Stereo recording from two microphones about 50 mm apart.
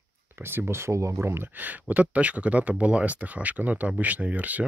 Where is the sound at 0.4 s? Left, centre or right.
Right.